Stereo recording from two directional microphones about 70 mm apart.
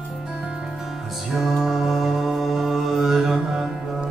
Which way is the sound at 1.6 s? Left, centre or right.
Centre.